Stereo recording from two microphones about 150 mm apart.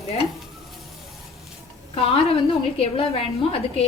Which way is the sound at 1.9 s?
40° left (ahead or behind).